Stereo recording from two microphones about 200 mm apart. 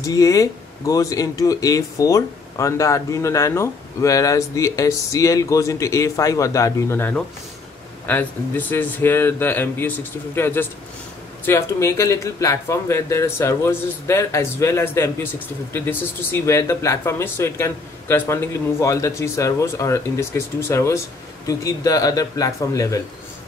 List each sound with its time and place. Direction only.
0.0 s speech: 15° left (ahead or behind)